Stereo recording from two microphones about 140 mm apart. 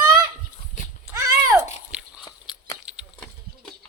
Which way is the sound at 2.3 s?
25° left (ahead or behind).